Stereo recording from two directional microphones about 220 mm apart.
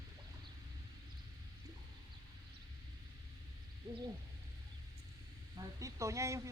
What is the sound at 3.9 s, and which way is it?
Hoot, 15° right (ahead or behind).